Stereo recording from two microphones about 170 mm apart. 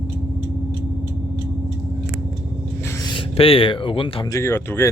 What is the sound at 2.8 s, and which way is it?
Speech, 20° left (ahead or behind).